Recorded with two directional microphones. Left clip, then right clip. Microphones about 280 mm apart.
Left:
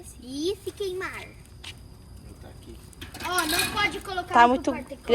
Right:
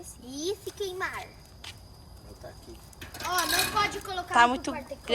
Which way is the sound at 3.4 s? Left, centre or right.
Right.